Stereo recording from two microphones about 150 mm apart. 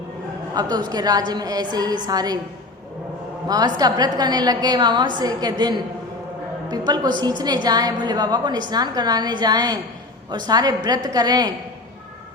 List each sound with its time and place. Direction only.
0.5 s a woman's voice: 30° right (ahead or behind)
3.4 s a woman's voice: 25° right (ahead or behind)